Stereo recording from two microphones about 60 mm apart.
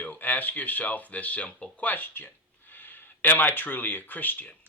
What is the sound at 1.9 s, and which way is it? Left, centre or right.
Speech, left.